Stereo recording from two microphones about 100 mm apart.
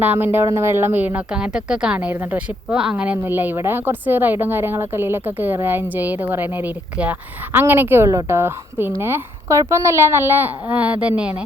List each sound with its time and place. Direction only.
0.0 s a woman's voice: 20° right (ahead or behind)